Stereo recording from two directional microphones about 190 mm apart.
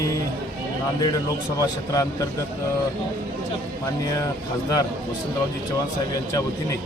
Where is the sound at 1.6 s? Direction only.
20° left (ahead or behind).